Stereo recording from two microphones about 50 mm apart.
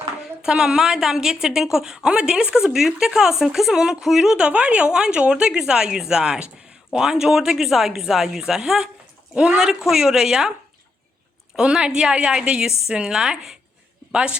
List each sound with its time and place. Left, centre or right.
0.2 s a woman's voice: centre
9.6 s a woman's voice: centre
11.5 s a woman's voice: centre